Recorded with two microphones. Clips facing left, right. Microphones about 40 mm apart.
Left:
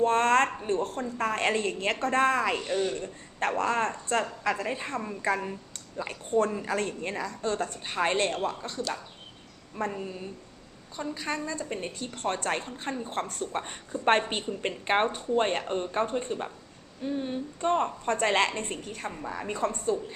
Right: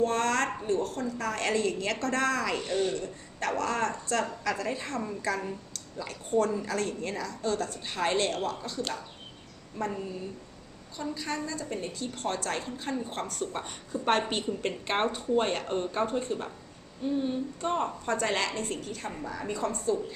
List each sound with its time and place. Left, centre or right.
0.0 s a woman's voice: left
10.9 s a woman's voice: left
15.6 s speech: left
16.0 s a woman's voice: left
17.2 s a woman's voice: left
17.7 s speech: left
18.0 s a woman's voice: left